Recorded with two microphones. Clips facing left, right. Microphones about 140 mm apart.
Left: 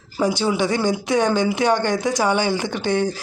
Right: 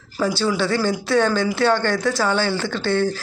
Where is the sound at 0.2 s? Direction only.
20° left (ahead or behind).